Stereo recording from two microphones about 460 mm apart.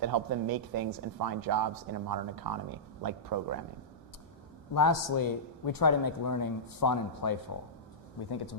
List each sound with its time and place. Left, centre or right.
0.0 s speech: right
4.7 s speech: left